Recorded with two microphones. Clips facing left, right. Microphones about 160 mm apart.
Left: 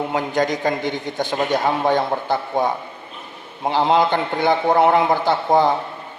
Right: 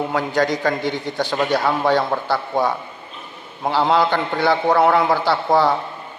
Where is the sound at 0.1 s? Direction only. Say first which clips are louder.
Right 1 dB; 20° left (ahead or behind).